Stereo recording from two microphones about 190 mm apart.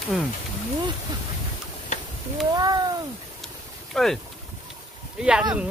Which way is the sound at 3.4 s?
Centre (ahead or behind).